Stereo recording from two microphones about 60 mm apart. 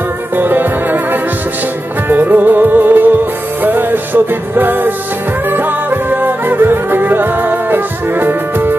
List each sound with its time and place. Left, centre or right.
0.4 s music: right